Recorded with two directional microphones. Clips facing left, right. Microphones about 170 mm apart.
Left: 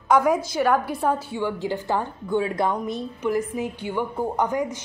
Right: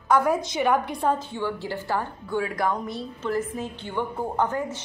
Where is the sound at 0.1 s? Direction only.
10° left (ahead or behind).